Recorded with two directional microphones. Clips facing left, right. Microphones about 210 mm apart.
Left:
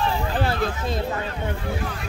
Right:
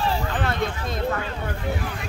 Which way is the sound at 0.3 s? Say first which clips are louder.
Left 2 dB; 30° left (ahead or behind).